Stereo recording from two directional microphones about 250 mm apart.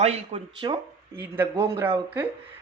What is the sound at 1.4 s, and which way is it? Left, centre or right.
Speech, centre.